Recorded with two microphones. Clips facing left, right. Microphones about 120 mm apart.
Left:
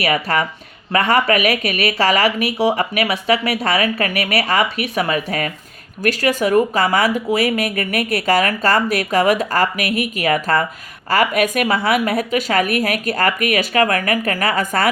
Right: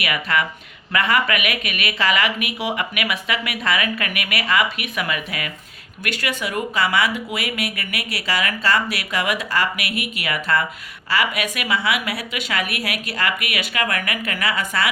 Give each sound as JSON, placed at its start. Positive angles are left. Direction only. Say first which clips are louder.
{"t": 0.0, "sound": "speech", "louder": "left 4 dB", "side_deg": 35}